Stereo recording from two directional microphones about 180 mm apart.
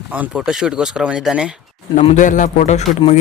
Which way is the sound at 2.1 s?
45° left (ahead or behind).